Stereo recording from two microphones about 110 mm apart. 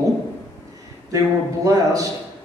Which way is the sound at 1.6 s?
30° right (ahead or behind).